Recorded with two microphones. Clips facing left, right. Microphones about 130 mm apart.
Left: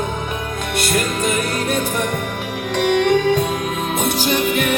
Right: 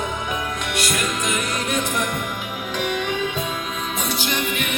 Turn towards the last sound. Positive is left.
turn(degrees=40)  # may be behind; listen again after turning